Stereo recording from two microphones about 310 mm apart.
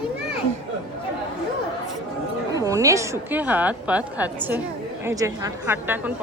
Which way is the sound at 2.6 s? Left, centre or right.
Centre.